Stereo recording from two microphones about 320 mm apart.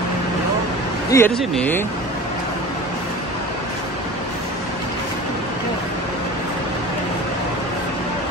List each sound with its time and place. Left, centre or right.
1.1 s speech: centre